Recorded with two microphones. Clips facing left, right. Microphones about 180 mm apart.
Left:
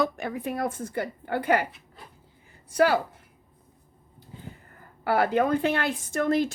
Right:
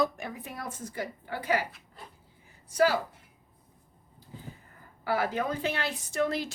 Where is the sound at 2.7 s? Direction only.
60° left (ahead or behind).